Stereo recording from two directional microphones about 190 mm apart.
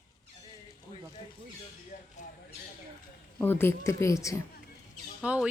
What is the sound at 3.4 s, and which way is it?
Speech, 10° left (ahead or behind).